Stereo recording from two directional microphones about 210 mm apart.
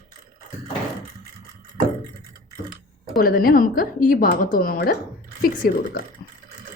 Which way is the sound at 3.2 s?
45° left (ahead or behind).